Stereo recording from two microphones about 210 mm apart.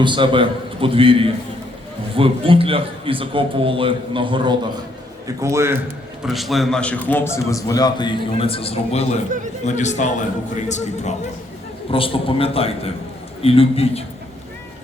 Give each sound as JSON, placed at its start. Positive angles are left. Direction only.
{"t": 0.0, "sound": "a man's voice", "side_deg": -25}
{"t": 6.2, "sound": "a man's voice", "side_deg": 0}